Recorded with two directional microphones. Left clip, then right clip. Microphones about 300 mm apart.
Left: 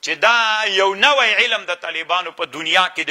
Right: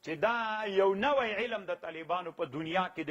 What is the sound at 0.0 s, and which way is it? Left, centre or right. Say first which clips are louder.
A man's voice: left 16 dB; centre.